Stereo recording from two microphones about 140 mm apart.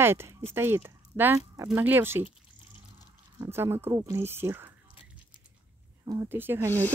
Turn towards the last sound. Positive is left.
turn(degrees=-15)  # may be behind; listen again after turning